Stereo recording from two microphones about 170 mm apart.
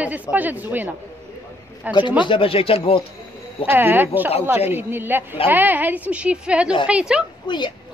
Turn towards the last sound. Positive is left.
turn(degrees=30)  # may be behind; listen again after turning